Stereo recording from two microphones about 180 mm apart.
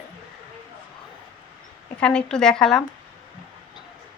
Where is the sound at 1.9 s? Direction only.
5° left (ahead or behind).